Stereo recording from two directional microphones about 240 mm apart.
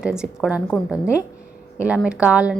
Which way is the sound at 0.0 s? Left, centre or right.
Centre.